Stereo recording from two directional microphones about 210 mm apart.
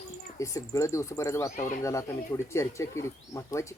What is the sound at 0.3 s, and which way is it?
Speech, 15° left (ahead or behind).